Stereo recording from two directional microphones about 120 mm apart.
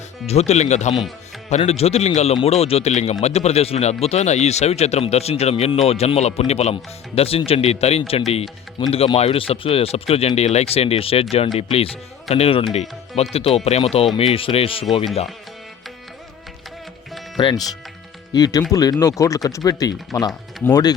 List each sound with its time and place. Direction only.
0.3 s a man's voice: 65° left (ahead or behind)
17.3 s speech: 40° left (ahead or behind)